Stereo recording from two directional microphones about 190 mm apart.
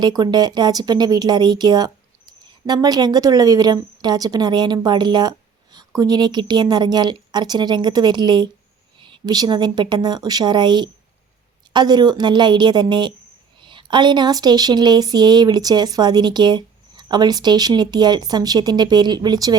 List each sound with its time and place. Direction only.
0.0 s speech: 20° right (ahead or behind)